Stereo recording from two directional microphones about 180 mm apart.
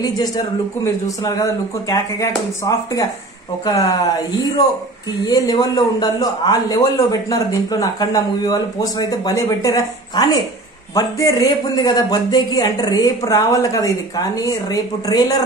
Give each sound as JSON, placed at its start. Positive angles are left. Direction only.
{"t": 1.0, "sound": "a man's voice", "side_deg": 20}
{"t": 5.2, "sound": "a man's voice", "side_deg": 20}